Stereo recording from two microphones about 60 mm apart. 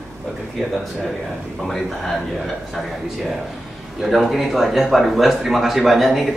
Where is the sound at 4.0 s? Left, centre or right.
Centre.